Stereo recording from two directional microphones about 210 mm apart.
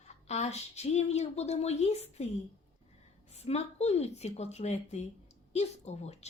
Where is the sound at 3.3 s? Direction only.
30° left (ahead or behind).